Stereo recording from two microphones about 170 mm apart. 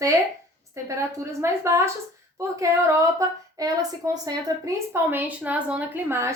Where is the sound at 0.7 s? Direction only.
15° right (ahead or behind).